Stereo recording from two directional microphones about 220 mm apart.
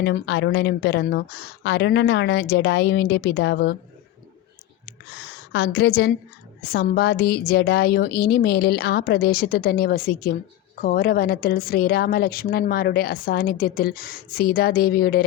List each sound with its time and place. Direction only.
0.0 s a woman's voice: 55° left (ahead or behind)
4.9 s a woman's voice: 45° left (ahead or behind)